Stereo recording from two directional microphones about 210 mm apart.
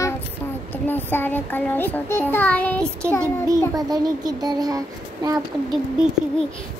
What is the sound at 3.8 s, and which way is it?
A child's voice, 20° right (ahead or behind).